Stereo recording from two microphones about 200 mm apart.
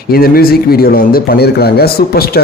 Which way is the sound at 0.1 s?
50° left (ahead or behind).